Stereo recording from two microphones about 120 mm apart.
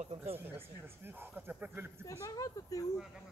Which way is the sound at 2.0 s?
30° left (ahead or behind).